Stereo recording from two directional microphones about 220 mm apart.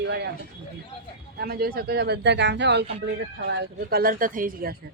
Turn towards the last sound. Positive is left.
turn(degrees=-40)  # may be behind; listen again after turning